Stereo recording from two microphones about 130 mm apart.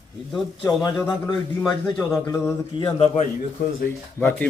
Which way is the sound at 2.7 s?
40° left (ahead or behind).